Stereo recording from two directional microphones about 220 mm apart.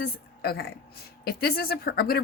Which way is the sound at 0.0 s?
45° left (ahead or behind).